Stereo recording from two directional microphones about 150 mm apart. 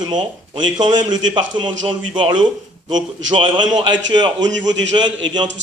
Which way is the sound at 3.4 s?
30° right (ahead or behind).